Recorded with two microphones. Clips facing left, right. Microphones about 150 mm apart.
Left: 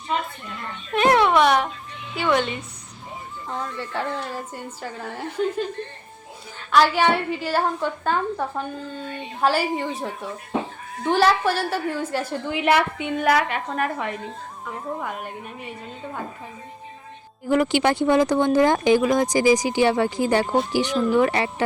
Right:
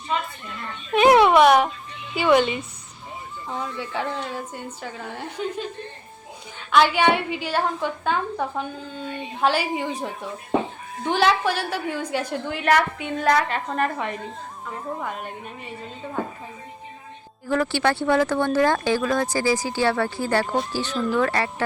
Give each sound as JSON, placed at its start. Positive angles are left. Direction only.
{"t": 0.9, "sound": "a woman's voice", "side_deg": -5}
{"t": 17.5, "sound": "speech", "side_deg": 15}